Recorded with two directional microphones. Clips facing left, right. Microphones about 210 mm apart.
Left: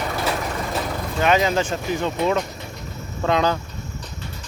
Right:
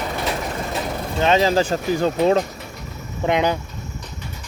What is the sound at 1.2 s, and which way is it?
Speech, 30° right (ahead or behind).